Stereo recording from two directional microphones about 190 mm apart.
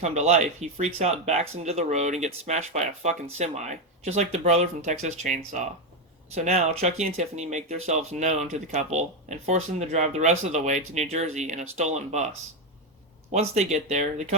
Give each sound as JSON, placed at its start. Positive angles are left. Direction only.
{"t": 0.0, "sound": "speech", "side_deg": -35}
{"t": 13.5, "sound": "speech", "side_deg": -35}